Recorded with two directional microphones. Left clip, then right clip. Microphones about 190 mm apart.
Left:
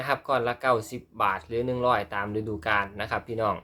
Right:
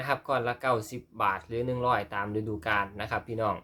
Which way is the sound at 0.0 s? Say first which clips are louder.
Left 3 dB; centre (ahead or behind).